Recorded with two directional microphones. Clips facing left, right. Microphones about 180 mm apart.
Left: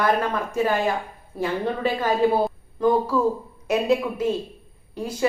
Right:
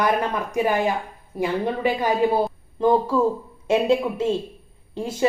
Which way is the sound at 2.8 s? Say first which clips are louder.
Right 1 dB; 25° right (ahead or behind).